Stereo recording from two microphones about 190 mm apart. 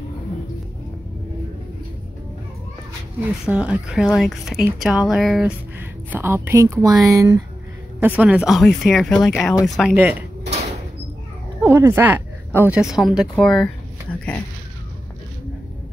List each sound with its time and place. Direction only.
3.4 s speech: 5° right (ahead or behind)
11.6 s a woman's voice: 15° right (ahead or behind)